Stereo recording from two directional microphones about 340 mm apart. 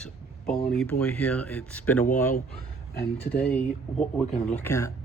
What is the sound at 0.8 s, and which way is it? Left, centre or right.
Speech, centre.